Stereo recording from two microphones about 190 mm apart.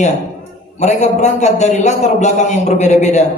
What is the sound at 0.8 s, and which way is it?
A man's voice, 35° left (ahead or behind).